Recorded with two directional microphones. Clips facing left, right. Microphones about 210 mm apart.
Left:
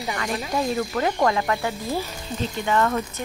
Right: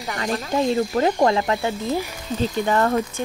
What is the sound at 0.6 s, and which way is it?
Speech, 30° right (ahead or behind).